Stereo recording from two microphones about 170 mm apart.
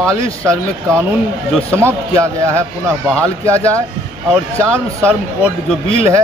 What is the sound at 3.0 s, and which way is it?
Speech, 5° left (ahead or behind).